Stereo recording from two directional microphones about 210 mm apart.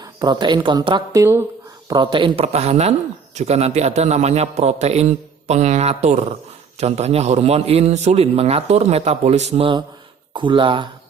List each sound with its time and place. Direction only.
0.0 s a woman's voice: 20° right (ahead or behind)